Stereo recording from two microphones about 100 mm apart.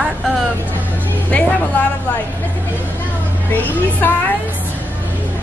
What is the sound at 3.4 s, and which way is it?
Speech, 20° left (ahead or behind).